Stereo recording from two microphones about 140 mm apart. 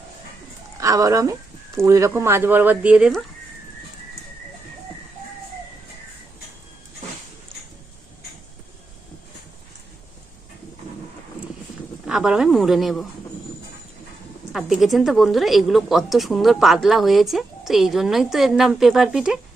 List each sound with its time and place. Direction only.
0.8 s speech: 25° right (ahead or behind)
12.0 s a woman's voice: 5° right (ahead or behind)
14.5 s a woman's voice: centre (ahead or behind)